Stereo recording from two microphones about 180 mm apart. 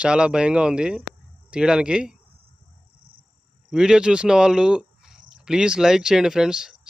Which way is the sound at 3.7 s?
5° right (ahead or behind).